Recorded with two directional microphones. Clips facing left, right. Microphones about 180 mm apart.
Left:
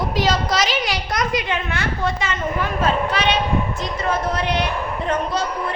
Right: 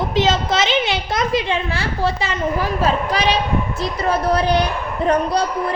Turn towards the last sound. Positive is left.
turn(degrees=-35)  # may be behind; listen again after turning